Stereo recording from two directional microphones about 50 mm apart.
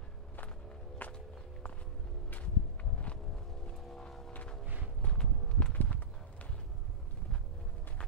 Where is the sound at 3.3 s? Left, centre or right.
Centre.